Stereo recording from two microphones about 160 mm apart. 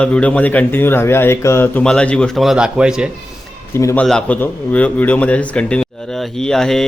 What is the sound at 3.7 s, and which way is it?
Speech, 15° left (ahead or behind).